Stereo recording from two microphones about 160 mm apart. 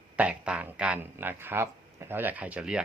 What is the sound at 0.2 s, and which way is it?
Speech, 10° right (ahead or behind).